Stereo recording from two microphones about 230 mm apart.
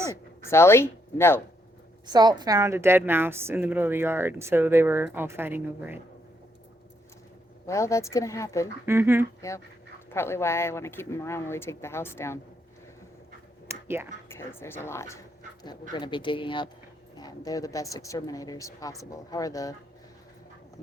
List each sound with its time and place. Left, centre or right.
0.1 s speech: centre
2.0 s a woman's voice: centre
7.7 s speech: centre
8.9 s a woman's voice: centre
10.1 s speech: centre
13.7 s a sound: centre
14.3 s speech: centre